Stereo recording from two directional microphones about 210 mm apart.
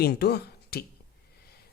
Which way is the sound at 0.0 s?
50° left (ahead or behind).